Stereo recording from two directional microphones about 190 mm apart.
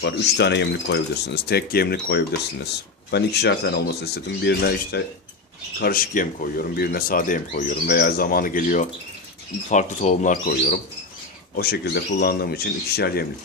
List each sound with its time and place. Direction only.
0.0 s speech: 65° left (ahead or behind)
5.8 s speech: 50° left (ahead or behind)
11.5 s speech: 55° left (ahead or behind)